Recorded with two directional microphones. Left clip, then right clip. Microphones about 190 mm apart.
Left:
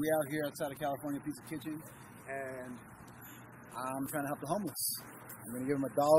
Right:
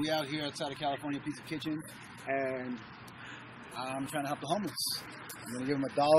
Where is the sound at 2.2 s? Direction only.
40° right (ahead or behind).